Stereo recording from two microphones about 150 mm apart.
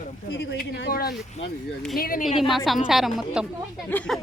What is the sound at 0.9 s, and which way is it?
Speech, 90° left.